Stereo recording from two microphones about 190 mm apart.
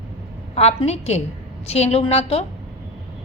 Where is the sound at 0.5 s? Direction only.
35° left (ahead or behind).